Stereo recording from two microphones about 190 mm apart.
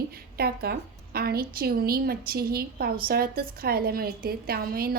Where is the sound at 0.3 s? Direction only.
55° right (ahead or behind).